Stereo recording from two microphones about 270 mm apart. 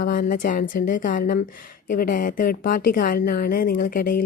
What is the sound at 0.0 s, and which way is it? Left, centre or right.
Speech, left.